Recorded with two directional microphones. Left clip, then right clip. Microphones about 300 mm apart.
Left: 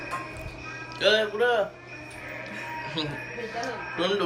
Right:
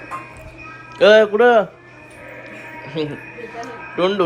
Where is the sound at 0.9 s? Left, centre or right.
Centre.